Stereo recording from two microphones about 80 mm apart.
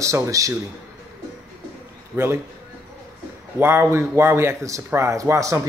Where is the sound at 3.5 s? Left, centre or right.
Right.